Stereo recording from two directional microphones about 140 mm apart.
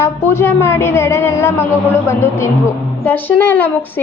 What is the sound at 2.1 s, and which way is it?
A woman's voice, 15° left (ahead or behind).